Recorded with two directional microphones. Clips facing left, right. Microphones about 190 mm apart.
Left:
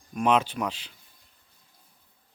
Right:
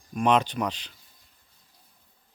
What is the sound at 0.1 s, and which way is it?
Speech, centre (ahead or behind).